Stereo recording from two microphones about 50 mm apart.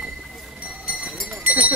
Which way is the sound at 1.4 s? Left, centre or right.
Right.